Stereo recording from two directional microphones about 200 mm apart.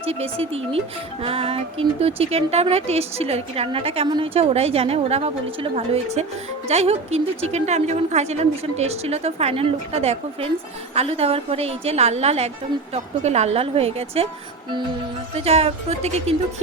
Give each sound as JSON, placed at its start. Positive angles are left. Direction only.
{"t": 0.0, "sound": "a woman's voice", "side_deg": -30}
{"t": 15.4, "sound": "a woman's voice", "side_deg": -30}